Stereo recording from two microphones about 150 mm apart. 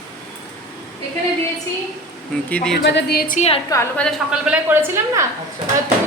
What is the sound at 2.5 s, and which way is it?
Speech, 5° left (ahead or behind).